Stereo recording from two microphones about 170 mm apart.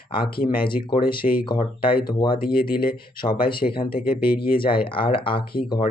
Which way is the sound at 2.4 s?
60° left (ahead or behind).